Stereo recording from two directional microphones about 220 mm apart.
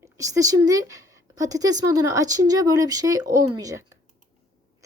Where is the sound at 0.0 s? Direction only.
15° right (ahead or behind).